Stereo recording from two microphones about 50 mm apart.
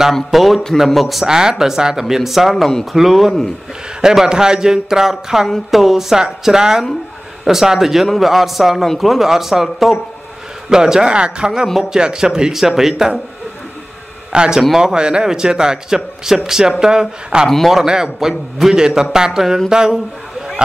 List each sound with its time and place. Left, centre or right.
0.1 s a man's voice: centre
1.2 s a man's voice: centre
14.3 s a man's voice: centre